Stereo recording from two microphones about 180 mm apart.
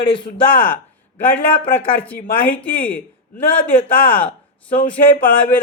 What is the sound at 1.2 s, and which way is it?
Speech, 10° left (ahead or behind).